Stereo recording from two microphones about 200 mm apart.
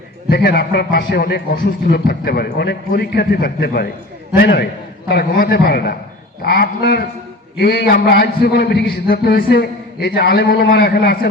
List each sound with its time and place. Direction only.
0.3 s a man's voice: 55° left (ahead or behind)